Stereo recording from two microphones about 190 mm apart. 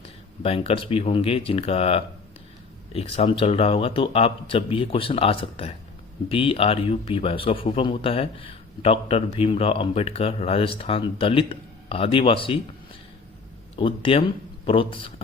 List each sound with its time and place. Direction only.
0.0 s speech: 30° left (ahead or behind)
13.7 s speech: 30° left (ahead or behind)